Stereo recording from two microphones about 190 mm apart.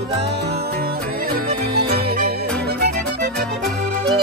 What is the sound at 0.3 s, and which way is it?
Music, 60° right (ahead or behind).